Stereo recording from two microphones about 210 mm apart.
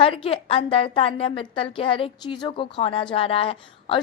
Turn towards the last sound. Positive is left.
turn(degrees=25)  # may be behind; listen again after turning